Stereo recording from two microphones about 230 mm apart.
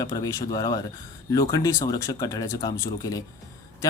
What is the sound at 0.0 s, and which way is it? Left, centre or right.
A man's voice, centre.